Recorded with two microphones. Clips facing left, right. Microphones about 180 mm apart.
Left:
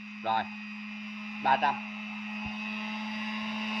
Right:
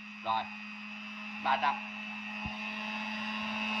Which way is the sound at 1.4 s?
50° left (ahead or behind).